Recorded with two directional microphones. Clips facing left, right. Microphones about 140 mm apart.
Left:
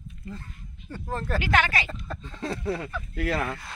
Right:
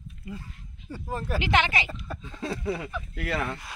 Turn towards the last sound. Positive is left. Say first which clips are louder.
# left 2 dB
turn(degrees=0)  # may be behind; listen again after turning